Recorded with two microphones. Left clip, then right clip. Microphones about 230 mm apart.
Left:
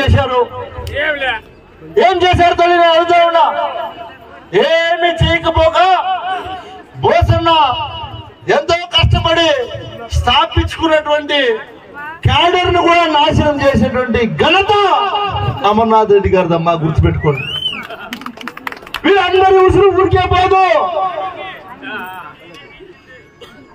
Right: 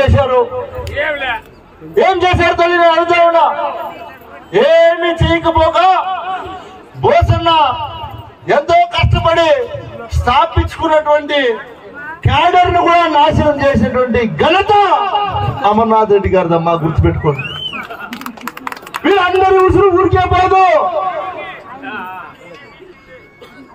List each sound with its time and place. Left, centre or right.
0.0 s a man's voice: left
0.9 s a sound: left
2.0 s a man's voice: left
5.9 s music: left
7.0 s a man's voice: left
19.0 s a man's voice: left
21.8 s a sound: left